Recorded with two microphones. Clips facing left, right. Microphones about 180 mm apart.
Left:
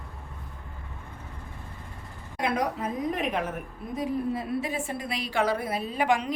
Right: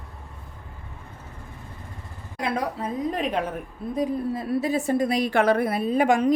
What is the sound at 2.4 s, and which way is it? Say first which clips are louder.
A woman's voice: right 1 dB; 30° right (ahead or behind).